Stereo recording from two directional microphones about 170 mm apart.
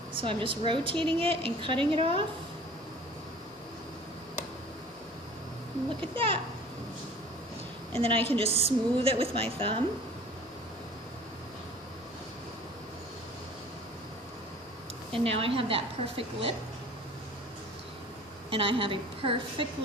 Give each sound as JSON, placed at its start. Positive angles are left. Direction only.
{"t": 0.2, "sound": "a woman's voice", "side_deg": -30}
{"t": 6.0, "sound": "a woman's voice", "side_deg": -30}
{"t": 7.9, "sound": "a woman's voice", "side_deg": -35}
{"t": 15.1, "sound": "a woman's voice", "side_deg": -35}
{"t": 18.5, "sound": "a woman's voice", "side_deg": -30}